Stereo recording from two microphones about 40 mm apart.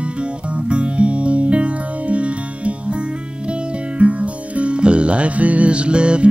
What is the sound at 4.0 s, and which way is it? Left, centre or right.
Music, right.